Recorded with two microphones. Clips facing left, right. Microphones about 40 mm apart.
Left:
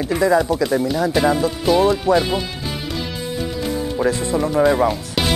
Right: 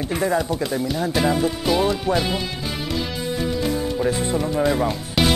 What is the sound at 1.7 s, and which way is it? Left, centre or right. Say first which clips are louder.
Speech: left 6 dB; centre.